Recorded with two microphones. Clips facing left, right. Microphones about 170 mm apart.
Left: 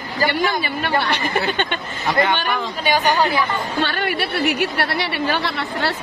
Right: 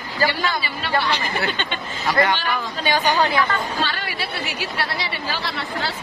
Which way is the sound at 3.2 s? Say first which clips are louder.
Left 1 dB; 15° left (ahead or behind).